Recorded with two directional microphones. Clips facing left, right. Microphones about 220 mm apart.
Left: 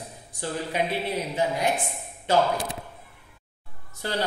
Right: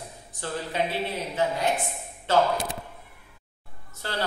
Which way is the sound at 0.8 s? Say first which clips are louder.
Even; 15° left (ahead or behind).